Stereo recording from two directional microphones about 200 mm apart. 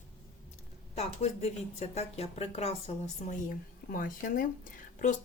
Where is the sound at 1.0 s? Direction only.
35° left (ahead or behind).